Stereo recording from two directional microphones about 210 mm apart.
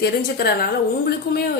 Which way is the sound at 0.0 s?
50° left (ahead or behind).